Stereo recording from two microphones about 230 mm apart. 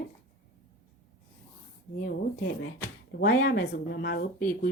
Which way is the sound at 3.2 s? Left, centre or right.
Left.